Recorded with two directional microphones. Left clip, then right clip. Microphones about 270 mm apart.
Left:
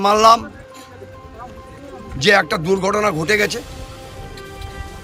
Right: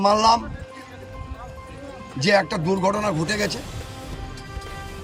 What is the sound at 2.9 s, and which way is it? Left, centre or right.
Speech, centre.